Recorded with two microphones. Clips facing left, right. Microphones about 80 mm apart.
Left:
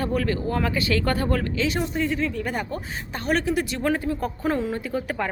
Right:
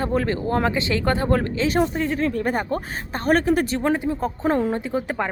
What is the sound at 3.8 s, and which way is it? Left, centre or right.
Speech, right.